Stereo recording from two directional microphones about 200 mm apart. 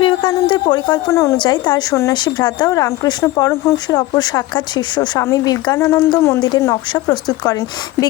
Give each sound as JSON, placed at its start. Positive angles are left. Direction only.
{"t": 0.0, "sound": "a woman's voice", "side_deg": 25}